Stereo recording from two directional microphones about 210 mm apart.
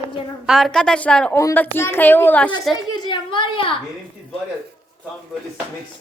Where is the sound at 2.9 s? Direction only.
20° left (ahead or behind).